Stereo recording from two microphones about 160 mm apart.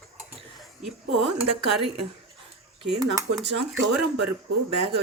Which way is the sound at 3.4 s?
90° right.